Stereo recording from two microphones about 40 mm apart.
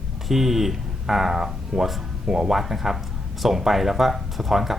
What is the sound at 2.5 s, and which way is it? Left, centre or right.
Speech, centre.